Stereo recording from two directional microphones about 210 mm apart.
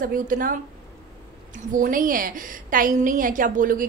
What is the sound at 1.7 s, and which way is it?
A woman's voice, 40° right (ahead or behind).